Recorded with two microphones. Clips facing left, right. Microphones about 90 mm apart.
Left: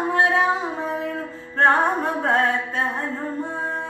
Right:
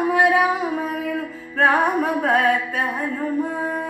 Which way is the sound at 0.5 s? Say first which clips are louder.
Right 2 dB; 30° left (ahead or behind).